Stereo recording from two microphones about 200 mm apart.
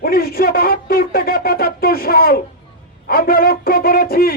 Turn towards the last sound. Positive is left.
turn(degrees=45)  # may be behind; listen again after turning